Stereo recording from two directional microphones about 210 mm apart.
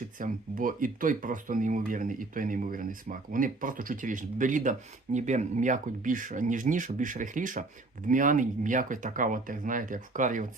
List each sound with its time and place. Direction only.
0.2 s speech: 40° right (ahead or behind)